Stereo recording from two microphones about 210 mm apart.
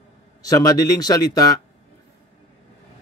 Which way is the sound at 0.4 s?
15° left (ahead or behind).